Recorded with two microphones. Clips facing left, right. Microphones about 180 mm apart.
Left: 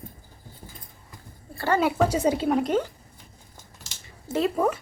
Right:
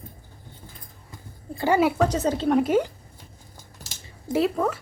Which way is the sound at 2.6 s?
10° right (ahead or behind).